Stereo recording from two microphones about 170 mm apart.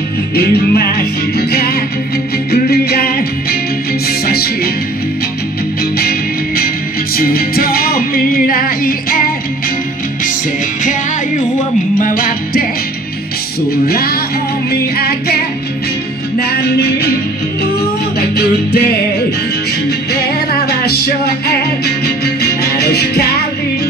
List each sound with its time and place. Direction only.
0.4 s music: 65° left (ahead or behind)
5.9 s music: 60° left (ahead or behind)
10.8 s music: 50° left (ahead or behind)
13.8 s music: 60° left (ahead or behind)
16.3 s music: 70° left (ahead or behind)
18.3 s music: 70° left (ahead or behind)
20.6 s music: 70° left (ahead or behind)